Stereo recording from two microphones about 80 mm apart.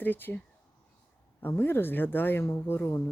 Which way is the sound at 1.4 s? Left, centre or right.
Left.